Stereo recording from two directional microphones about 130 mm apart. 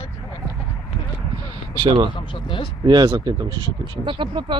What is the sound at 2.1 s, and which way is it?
Speech, 40° left (ahead or behind).